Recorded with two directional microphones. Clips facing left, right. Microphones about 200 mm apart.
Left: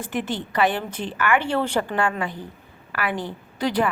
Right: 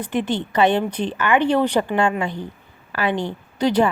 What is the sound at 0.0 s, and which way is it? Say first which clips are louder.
A woman's voice: right 5 dB; 20° right (ahead or behind).